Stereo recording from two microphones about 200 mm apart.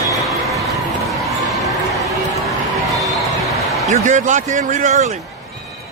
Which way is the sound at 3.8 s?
35° right (ahead or behind).